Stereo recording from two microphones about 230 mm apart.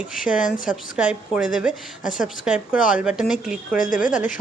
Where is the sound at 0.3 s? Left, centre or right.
Left.